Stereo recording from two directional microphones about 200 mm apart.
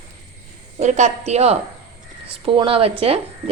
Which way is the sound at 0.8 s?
35° right (ahead or behind).